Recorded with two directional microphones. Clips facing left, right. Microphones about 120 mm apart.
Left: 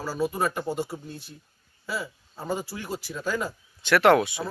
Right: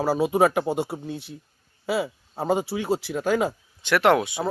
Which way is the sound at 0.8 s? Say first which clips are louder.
Right 4 dB; 70° right (ahead or behind).